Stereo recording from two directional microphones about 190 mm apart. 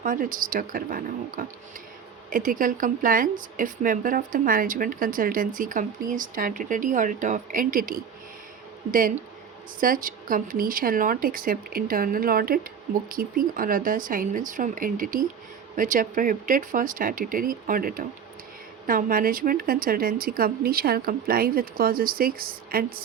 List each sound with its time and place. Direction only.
0.0 s a woman's voice: 45° right (ahead or behind)